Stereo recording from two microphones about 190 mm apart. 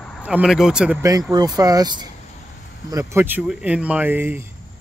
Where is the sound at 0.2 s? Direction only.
5° right (ahead or behind).